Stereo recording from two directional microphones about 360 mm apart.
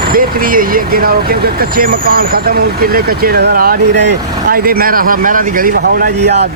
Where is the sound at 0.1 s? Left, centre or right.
Right.